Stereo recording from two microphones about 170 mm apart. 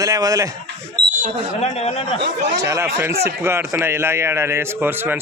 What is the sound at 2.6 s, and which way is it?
A man's voice, 15° right (ahead or behind).